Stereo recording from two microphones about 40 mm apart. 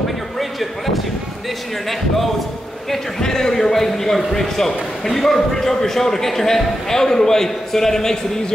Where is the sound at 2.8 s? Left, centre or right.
Centre.